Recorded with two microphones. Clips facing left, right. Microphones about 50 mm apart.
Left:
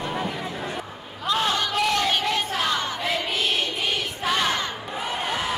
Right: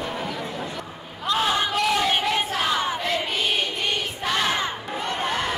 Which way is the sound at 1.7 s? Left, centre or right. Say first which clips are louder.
Right 1 dB; centre.